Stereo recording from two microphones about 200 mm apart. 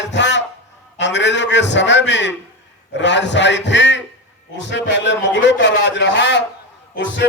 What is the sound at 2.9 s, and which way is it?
A man's voice, 60° left (ahead or behind).